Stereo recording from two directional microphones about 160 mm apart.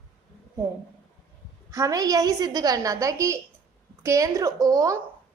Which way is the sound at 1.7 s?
20° right (ahead or behind).